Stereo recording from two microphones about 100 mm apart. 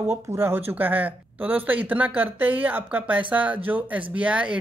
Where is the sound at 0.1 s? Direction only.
25° right (ahead or behind).